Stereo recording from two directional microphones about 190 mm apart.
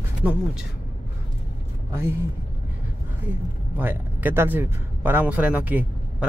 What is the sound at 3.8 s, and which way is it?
A man's voice, 10° right (ahead or behind).